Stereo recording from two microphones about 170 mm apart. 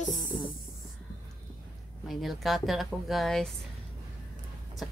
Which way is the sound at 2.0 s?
Centre (ahead or behind).